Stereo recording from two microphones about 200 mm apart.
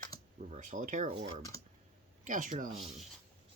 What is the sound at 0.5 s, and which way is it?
Speech, 40° right (ahead or behind).